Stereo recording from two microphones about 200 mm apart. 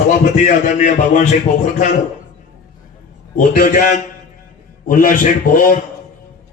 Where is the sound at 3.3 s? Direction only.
40° left (ahead or behind).